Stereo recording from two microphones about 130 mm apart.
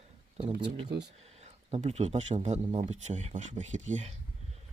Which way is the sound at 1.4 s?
60° right (ahead or behind).